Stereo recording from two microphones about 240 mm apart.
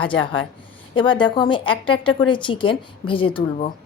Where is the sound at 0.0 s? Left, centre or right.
Left.